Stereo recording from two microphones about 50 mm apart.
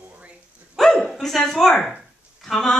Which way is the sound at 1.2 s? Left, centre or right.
Centre.